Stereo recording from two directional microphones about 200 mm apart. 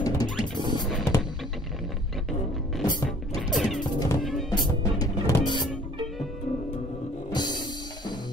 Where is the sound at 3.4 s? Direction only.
Centre (ahead or behind).